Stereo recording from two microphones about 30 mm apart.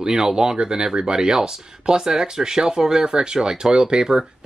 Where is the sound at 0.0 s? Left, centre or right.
Centre.